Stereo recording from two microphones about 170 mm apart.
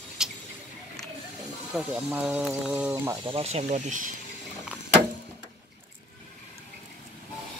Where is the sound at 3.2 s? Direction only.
35° right (ahead or behind).